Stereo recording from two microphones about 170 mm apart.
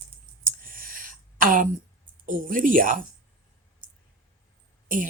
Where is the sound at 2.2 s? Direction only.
55° right (ahead or behind).